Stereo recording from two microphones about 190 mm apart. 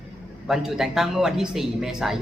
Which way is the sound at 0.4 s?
Centre (ahead or behind).